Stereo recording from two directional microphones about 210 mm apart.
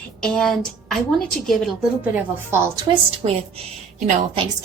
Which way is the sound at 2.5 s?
15° right (ahead or behind).